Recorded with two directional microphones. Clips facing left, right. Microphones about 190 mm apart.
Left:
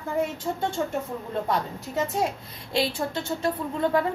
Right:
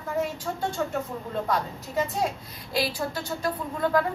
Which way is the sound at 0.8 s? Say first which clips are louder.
Right 1 dB; 25° left (ahead or behind).